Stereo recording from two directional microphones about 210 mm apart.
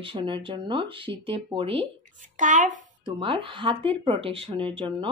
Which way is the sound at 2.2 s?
35° right (ahead or behind).